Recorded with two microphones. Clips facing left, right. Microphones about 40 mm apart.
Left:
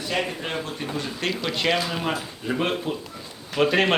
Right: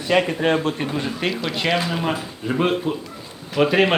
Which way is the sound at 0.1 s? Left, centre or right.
Right.